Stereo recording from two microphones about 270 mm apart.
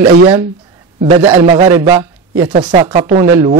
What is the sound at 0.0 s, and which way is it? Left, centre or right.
A man's voice, centre.